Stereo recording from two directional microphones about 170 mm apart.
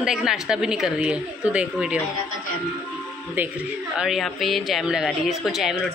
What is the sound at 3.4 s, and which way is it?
A woman's voice, 5° right (ahead or behind).